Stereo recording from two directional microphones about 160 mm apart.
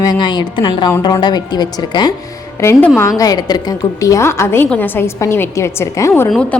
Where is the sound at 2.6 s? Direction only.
15° left (ahead or behind).